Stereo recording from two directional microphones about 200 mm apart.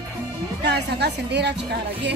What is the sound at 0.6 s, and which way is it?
Speech, 55° right (ahead or behind).